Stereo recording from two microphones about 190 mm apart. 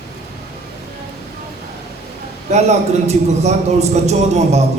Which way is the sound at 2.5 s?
35° right (ahead or behind).